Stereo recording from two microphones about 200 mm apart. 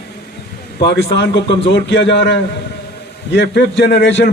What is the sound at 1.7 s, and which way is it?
Speech, 60° left (ahead or behind).